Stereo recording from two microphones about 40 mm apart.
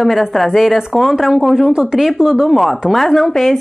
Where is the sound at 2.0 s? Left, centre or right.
Centre.